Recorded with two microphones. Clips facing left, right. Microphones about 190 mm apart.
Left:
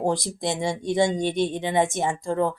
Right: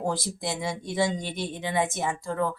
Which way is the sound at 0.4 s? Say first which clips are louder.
Left 7 dB; 25° left (ahead or behind).